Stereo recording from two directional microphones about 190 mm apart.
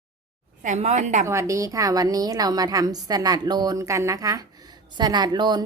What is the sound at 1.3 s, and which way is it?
A woman's voice, 15° right (ahead or behind).